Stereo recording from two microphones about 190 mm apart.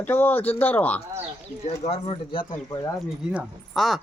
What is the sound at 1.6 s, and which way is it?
Speech, 35° left (ahead or behind).